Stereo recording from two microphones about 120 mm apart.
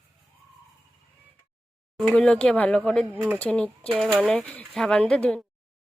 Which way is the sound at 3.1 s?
15° right (ahead or behind).